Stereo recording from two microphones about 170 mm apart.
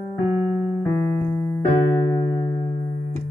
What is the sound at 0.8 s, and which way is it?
Electric piano, 15° left (ahead or behind).